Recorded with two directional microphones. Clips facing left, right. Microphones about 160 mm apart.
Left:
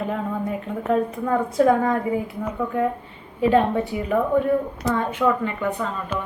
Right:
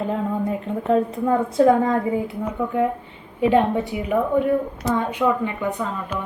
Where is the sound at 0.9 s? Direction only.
25° right (ahead or behind).